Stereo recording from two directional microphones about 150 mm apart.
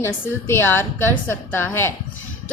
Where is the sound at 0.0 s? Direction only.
15° left (ahead or behind).